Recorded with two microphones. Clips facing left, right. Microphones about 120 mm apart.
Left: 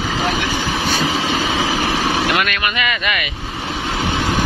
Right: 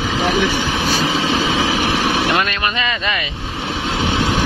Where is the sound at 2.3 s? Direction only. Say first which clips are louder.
Right 1 dB; 25° right (ahead or behind).